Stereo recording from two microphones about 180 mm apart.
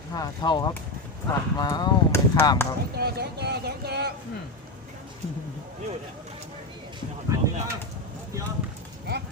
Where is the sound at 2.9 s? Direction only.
60° right (ahead or behind).